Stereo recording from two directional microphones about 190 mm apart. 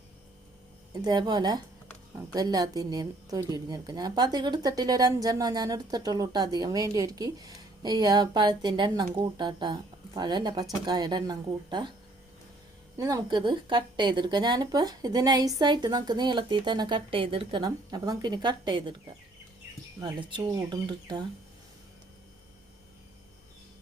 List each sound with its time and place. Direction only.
1.0 s a woman's voice: 20° right (ahead or behind)
13.0 s a woman's voice: 20° right (ahead or behind)
20.0 s a woman's voice: 20° right (ahead or behind)